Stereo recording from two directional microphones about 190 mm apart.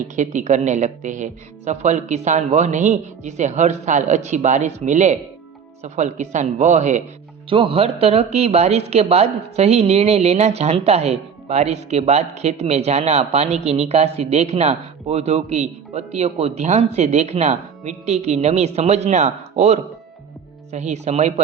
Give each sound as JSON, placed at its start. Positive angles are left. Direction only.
{"t": 0.2, "sound": "speech", "side_deg": -40}